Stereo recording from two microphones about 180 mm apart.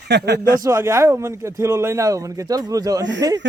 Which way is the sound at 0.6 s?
15° right (ahead or behind).